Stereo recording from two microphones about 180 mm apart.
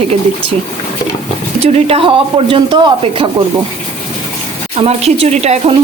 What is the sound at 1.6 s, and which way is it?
Speech, 30° right (ahead or behind).